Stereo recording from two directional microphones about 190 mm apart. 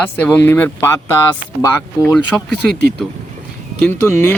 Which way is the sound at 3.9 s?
10° left (ahead or behind).